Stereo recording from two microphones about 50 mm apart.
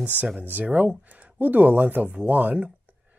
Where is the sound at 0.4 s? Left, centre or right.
Right.